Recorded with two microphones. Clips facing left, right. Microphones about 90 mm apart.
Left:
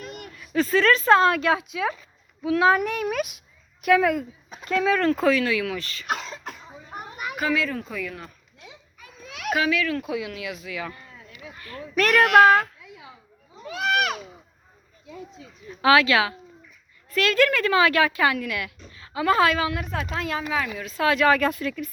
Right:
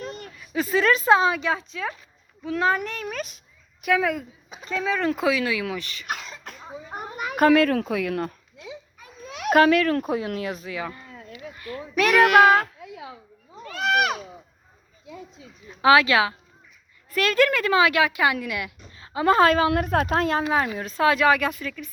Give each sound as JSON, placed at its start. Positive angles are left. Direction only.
{"t": 0.0, "sound": "a sound", "side_deg": -30}
{"t": 0.3, "sound": "a child's voice", "side_deg": -10}
{"t": 6.1, "sound": "cough", "side_deg": 30}
{"t": 6.9, "sound": "a sound", "side_deg": -40}
{"t": 7.3, "sound": "speech", "side_deg": -55}
{"t": 9.0, "sound": "a sound", "side_deg": -30}
{"t": 9.5, "sound": "speech", "side_deg": -50}
{"t": 11.9, "sound": "a woman's voice", "side_deg": -10}
{"t": 13.8, "sound": "a sound", "side_deg": -5}
{"t": 15.8, "sound": "a woman's voice", "side_deg": -20}
{"t": 18.9, "sound": "a woman's voice", "side_deg": -30}
{"t": 21.2, "sound": "a woman's voice", "side_deg": -10}
{"t": 21.6, "sound": "speech", "side_deg": 5}